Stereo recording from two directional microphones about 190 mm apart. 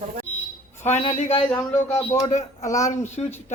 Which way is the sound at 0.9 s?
35° left (ahead or behind).